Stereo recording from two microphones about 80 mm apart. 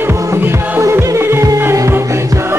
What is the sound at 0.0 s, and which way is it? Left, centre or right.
Music, right.